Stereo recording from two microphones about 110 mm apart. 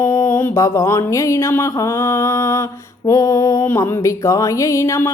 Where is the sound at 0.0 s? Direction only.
30° left (ahead or behind).